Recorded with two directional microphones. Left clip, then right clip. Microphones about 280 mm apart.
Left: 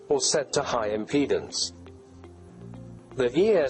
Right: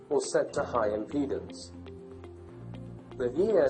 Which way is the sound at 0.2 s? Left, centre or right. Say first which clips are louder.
Left 3 dB; left.